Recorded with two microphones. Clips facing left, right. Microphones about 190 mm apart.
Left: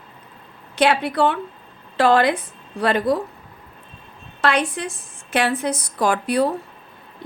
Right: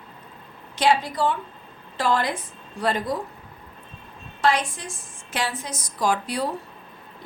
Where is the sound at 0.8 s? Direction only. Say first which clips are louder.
Left 3 dB; 65° left (ahead or behind).